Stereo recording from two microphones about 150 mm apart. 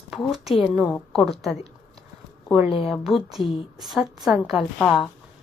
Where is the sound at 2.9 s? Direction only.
Centre (ahead or behind).